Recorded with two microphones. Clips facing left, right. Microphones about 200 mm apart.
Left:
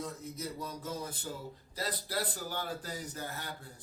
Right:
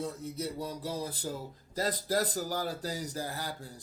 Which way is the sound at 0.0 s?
30° right (ahead or behind).